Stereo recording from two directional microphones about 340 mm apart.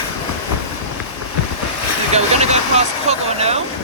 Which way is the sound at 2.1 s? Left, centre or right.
Centre.